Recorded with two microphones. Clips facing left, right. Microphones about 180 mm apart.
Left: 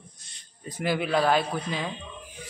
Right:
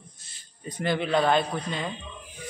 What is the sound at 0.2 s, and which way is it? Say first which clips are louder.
A man's voice: right 2 dB; 5° right (ahead or behind).